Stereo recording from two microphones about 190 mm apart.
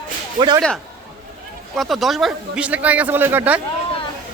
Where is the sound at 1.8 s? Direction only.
Centre (ahead or behind).